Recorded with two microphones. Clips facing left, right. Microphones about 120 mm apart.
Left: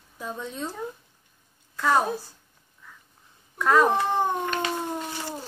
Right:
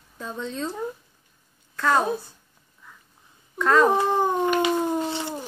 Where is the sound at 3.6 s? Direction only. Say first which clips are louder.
Right 1 dB; 15° left (ahead or behind).